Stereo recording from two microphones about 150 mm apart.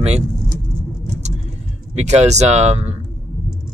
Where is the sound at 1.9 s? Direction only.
45° right (ahead or behind).